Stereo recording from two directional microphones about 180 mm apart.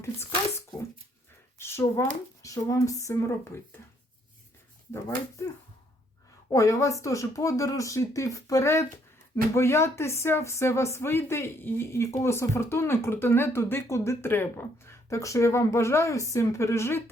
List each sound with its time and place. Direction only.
1.5 s a sound: 15° left (ahead or behind)
2.4 s speech: 20° left (ahead or behind)
4.9 s speech: 15° left (ahead or behind)
6.5 s speech: 20° left (ahead or behind)